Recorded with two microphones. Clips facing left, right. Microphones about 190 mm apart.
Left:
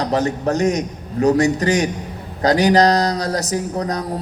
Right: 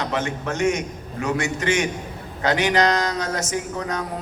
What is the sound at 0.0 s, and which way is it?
A man's voice, 35° left (ahead or behind).